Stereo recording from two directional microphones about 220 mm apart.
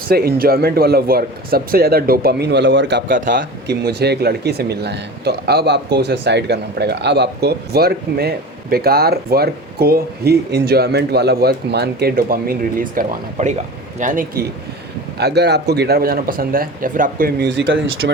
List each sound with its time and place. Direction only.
0.1 s a man's voice: 45° right (ahead or behind)
15.2 s speech: 50° right (ahead or behind)